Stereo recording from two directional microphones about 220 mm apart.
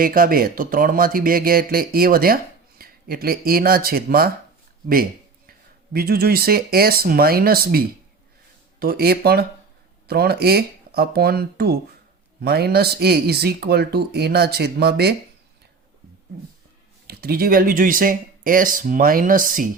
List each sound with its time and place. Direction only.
0.0 s speech: 40° right (ahead or behind)
5.5 s speech: 45° right (ahead or behind)
17.1 s speech: 45° right (ahead or behind)